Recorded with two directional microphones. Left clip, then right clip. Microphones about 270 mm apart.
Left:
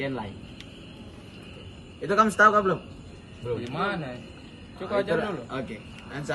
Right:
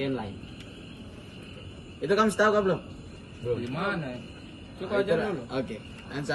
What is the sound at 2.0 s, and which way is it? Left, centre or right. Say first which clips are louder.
Speech: left 4 dB; centre.